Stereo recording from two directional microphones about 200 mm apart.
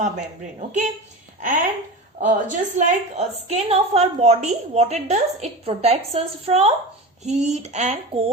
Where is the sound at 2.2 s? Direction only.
40° right (ahead or behind).